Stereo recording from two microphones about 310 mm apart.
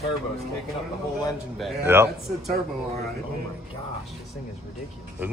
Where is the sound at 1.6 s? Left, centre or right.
Centre.